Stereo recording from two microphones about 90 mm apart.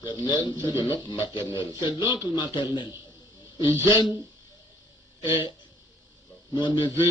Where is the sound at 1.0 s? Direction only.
65° left (ahead or behind).